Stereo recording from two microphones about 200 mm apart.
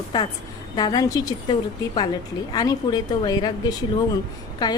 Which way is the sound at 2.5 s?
20° left (ahead or behind).